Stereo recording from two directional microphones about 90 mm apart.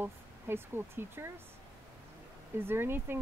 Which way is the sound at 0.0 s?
25° right (ahead or behind).